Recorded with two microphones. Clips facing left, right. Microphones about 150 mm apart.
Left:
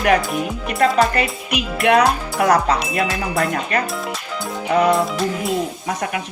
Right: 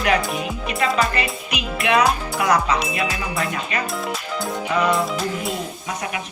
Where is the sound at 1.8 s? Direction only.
50° left (ahead or behind).